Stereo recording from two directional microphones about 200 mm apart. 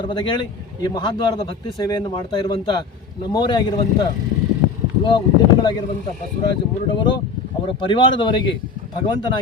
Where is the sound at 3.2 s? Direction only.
20° left (ahead or behind).